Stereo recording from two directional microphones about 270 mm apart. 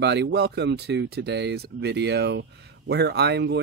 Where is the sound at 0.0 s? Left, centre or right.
Right.